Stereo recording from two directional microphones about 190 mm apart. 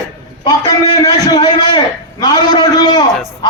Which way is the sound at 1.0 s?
20° left (ahead or behind).